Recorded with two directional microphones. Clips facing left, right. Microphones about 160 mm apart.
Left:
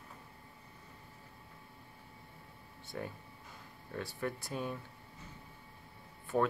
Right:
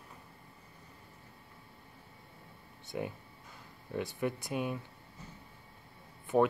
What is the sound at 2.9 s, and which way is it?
Speech, 10° right (ahead or behind).